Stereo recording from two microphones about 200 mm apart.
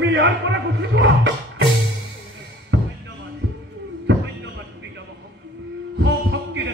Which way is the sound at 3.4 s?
80° right.